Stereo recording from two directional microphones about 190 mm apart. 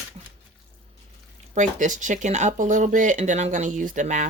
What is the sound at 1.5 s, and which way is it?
Speech, 40° right (ahead or behind).